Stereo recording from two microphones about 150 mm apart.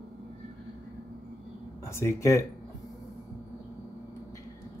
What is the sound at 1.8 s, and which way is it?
Speech, 20° left (ahead or behind).